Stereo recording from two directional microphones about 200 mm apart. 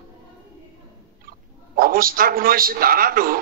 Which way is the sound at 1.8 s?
45° right (ahead or behind).